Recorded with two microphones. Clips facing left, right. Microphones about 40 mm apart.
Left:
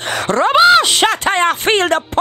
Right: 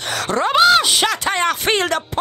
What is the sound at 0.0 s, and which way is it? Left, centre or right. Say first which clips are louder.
Groan: left 3 dB; left.